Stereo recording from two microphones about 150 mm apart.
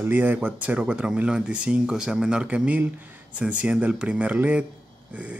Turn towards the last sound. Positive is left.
turn(degrees=-10)  # may be behind; listen again after turning